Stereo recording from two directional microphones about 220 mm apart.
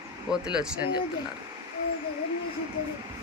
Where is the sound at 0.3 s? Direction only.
5° right (ahead or behind).